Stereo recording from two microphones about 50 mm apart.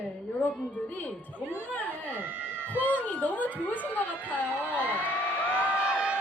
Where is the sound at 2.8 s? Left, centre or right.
Left.